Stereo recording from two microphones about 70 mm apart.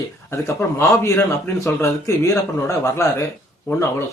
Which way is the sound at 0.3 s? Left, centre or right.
Left.